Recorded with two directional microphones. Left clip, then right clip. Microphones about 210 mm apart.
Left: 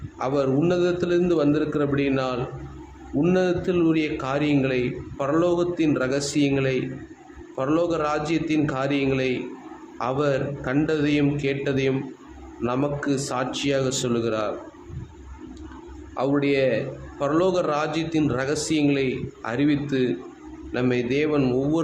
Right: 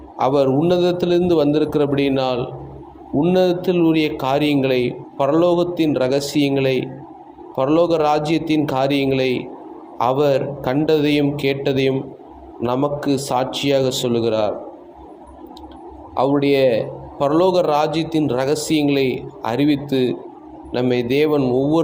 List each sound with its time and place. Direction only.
0.2 s a man's voice: 10° right (ahead or behind)
16.1 s a man's voice: 10° right (ahead or behind)